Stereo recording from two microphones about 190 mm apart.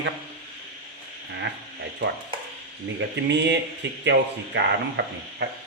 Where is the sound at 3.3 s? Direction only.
65° right (ahead or behind).